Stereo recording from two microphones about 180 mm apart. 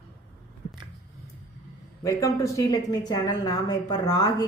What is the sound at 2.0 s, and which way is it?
Speech, 15° left (ahead or behind).